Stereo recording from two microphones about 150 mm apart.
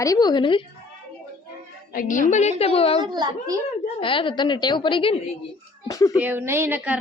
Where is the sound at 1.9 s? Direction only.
60° left (ahead or behind); by 3.0 s 40° left (ahead or behind).